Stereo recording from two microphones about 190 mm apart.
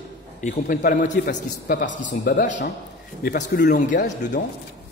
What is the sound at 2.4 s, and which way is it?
Speech, 40° left (ahead or behind).